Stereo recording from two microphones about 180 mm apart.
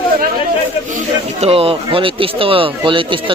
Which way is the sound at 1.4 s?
30° right (ahead or behind).